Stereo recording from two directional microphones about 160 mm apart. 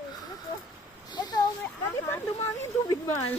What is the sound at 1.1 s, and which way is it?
Speech, 25° left (ahead or behind).